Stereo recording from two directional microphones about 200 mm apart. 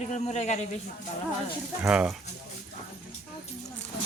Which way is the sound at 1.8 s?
5° right (ahead or behind).